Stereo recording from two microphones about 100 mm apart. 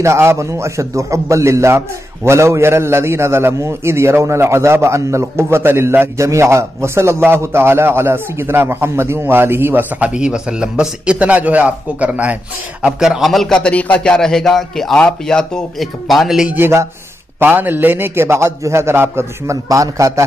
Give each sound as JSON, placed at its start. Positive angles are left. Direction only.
{"t": 0.0, "sound": "a man's voice", "side_deg": -25}
{"t": 16.5, "sound": "a man's voice", "side_deg": -25}